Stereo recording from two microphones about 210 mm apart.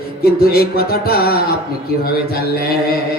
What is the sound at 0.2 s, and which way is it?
Speech, 45° left (ahead or behind).